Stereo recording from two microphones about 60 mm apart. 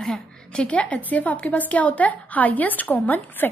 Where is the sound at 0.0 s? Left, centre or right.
Centre.